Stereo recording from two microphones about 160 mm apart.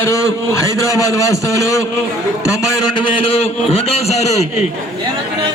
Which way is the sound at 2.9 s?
35° left (ahead or behind).